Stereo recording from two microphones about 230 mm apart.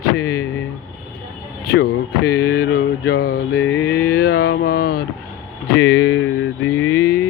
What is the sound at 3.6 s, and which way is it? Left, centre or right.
Mantra, left.